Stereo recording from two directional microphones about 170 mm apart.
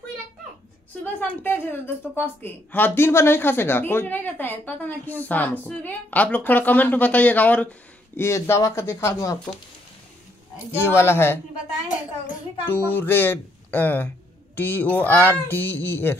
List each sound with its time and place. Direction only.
1.2 s speech: 10° left (ahead or behind)
10.7 s speech: 15° left (ahead or behind)
12.6 s speech: 10° left (ahead or behind)